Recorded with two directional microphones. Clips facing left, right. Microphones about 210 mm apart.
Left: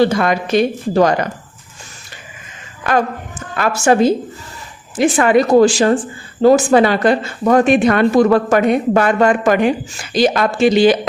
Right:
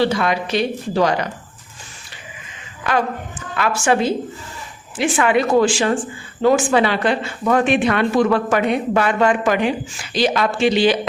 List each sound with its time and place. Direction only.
0.0 s speech: 45° left (ahead or behind)
3.5 s speech: 40° left (ahead or behind)